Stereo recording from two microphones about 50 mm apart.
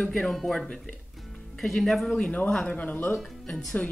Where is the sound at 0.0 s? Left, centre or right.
Centre.